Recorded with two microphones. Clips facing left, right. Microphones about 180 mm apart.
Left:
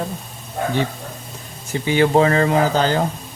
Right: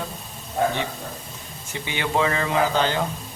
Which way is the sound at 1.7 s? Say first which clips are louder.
Left 9 dB; 35° left (ahead or behind).